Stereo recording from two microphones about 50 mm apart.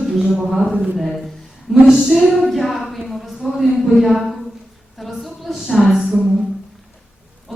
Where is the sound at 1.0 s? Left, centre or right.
Centre.